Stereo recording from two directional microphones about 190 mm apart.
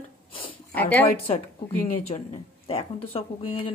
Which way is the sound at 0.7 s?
10° left (ahead or behind).